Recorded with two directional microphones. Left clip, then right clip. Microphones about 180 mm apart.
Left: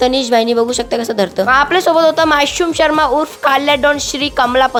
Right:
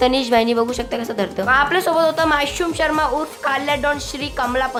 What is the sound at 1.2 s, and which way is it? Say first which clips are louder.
A woman's voice: left 4 dB; 35° left (ahead or behind).